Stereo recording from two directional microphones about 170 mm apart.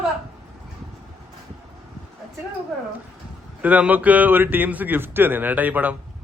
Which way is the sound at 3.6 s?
10° right (ahead or behind).